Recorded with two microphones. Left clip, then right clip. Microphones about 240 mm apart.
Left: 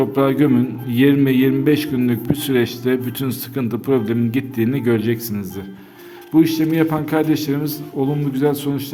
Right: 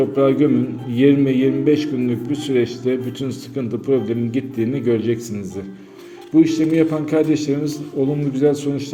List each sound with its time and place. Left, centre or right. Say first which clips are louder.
0.0 s a man's voice: right 1 dB; left